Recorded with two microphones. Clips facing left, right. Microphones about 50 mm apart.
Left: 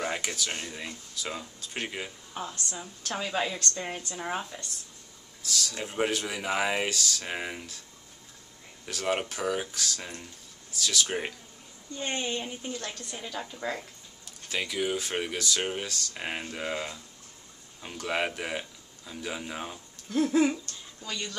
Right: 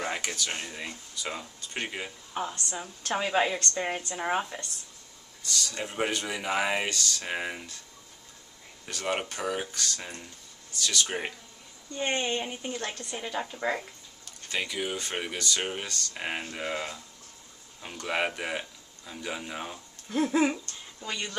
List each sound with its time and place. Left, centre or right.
0.0 s a woman's voice: centre; by 4.6 s right
5.4 s speech: centre
8.8 s speech: centre
11.1 s speech: centre
12.0 s a woman's voice: centre
14.5 s speech: centre; by 21.4 s right